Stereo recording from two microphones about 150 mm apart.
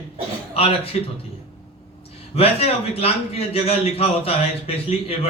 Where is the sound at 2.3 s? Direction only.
40° left (ahead or behind).